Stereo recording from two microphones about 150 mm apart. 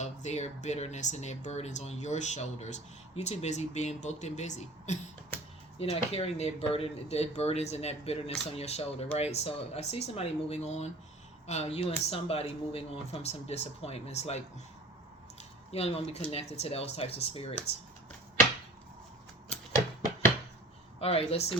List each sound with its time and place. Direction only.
0.0 s speech: 50° left (ahead or behind)
15.4 s a sound: 45° left (ahead or behind)
16.3 s speech: 40° left (ahead or behind)
21.0 s speech: 40° left (ahead or behind)